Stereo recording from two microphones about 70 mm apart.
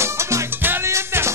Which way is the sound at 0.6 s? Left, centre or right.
Right.